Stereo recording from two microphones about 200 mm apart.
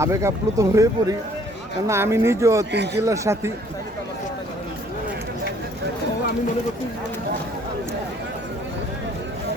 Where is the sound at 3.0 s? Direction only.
15° right (ahead or behind).